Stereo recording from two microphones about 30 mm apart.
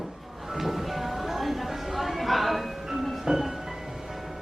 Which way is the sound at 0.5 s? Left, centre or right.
Centre.